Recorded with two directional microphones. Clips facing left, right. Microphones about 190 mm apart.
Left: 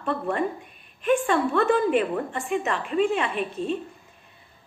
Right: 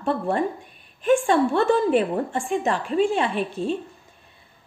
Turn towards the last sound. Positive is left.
turn(degrees=-30)  # may be behind; listen again after turning